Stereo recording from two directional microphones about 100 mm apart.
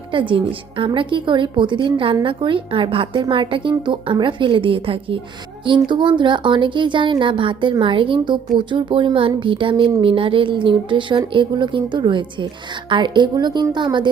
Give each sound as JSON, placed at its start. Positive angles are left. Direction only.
{"t": 0.1, "sound": "a woman's voice", "side_deg": -55}
{"t": 5.9, "sound": "a woman's voice", "side_deg": -50}